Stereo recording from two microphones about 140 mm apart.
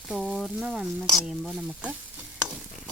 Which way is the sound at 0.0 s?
5° right (ahead or behind).